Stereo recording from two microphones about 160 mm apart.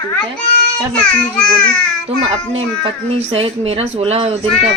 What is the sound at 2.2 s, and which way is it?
Speech, 40° right (ahead or behind).